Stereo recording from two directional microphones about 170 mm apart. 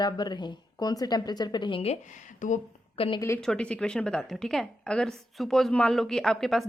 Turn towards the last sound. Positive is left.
turn(degrees=0)  # may be behind; listen again after turning